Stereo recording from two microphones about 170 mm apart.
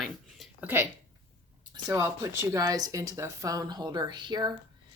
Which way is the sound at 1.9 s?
15° right (ahead or behind).